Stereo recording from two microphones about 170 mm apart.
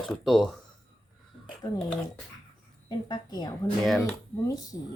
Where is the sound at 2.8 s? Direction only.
25° left (ahead or behind).